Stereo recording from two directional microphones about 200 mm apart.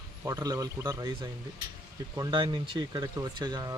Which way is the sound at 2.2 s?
20° right (ahead or behind).